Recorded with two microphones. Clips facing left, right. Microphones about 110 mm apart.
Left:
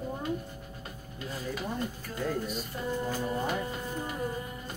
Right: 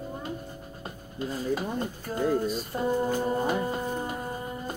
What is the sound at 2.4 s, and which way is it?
Music, 35° right (ahead or behind).